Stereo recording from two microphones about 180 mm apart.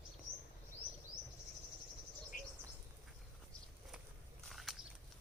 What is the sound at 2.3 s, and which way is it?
Bird, 50° left (ahead or behind).